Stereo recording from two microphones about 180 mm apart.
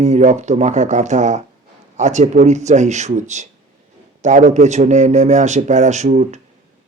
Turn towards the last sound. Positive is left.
turn(degrees=-40)  # may be behind; listen again after turning